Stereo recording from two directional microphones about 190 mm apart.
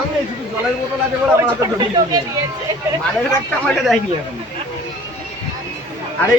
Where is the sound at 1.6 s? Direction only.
20° right (ahead or behind).